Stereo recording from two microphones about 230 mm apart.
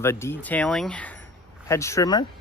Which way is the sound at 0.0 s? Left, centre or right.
Centre.